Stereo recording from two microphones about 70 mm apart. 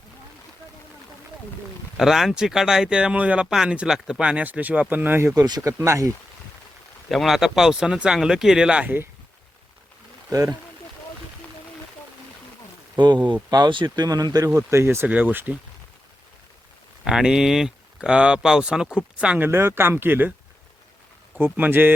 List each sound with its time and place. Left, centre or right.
2.0 s speech: centre
3.4 s speech: centre; by 5.3 s right
5.3 s speech: right
7.1 s speech: centre
10.2 s speech: right
13.0 s speech: right
14.5 s speech: right
15.0 s speech: right
17.0 s speech: centre
19.4 s speech: right
21.4 s speech: right